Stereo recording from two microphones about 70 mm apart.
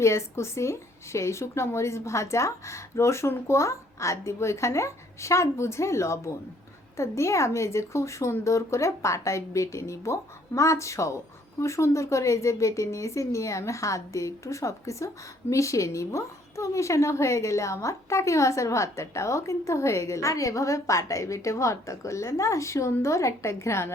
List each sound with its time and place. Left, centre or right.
0.0 s speech: left